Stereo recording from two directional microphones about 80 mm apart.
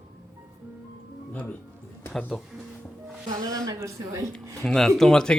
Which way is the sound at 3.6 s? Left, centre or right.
Right.